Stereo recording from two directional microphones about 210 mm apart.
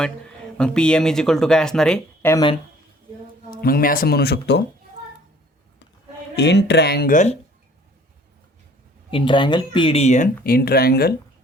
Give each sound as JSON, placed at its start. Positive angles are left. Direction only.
{"t": 0.5, "sound": "speech", "side_deg": 5}
{"t": 3.5, "sound": "speech", "side_deg": 45}
{"t": 6.3, "sound": "speech", "side_deg": 55}
{"t": 9.0, "sound": "speech", "side_deg": 25}